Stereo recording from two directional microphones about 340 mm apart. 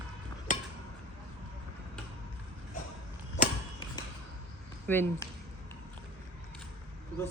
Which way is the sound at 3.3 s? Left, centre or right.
Centre.